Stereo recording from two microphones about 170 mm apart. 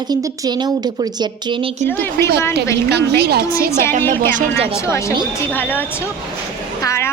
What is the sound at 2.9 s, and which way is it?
Speech, 75° right (ahead or behind).